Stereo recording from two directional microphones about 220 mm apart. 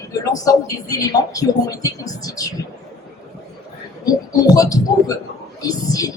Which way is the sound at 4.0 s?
15° left (ahead or behind).